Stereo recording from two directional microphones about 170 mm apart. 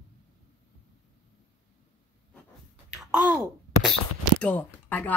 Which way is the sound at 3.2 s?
5° right (ahead or behind).